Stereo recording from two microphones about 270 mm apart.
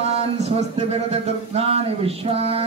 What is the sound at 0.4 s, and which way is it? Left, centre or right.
Speech, right.